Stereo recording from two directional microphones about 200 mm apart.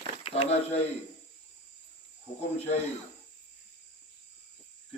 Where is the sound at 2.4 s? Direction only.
30° left (ahead or behind).